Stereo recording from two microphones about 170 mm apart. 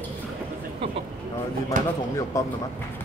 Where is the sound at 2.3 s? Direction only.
20° left (ahead or behind).